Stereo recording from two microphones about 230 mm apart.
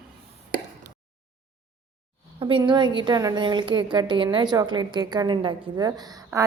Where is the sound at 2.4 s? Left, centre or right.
Right.